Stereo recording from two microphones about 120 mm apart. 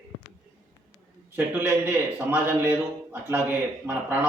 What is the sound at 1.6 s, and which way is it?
A man's voice, 15° right (ahead or behind).